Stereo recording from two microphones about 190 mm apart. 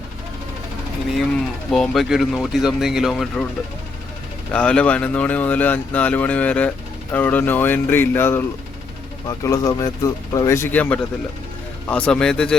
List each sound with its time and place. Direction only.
1.7 s speech: centre (ahead or behind)
4.5 s speech: 5° left (ahead or behind)